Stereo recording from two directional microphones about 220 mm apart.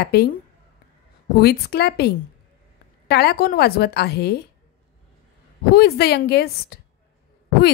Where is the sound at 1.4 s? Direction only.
45° left (ahead or behind).